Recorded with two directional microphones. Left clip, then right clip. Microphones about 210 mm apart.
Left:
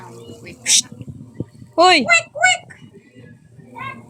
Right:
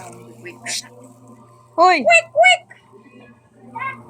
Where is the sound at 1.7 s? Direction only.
30° left (ahead or behind).